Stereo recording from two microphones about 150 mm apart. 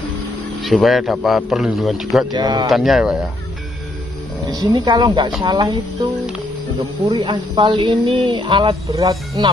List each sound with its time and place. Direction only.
0.7 s a man's voice: centre (ahead or behind)
2.3 s speech: 25° right (ahead or behind)
2.7 s a man's voice: centre (ahead or behind)
4.5 s speech: 30° right (ahead or behind)
7.2 s speech: 30° right (ahead or behind)
8.9 s speech: 25° right (ahead or behind)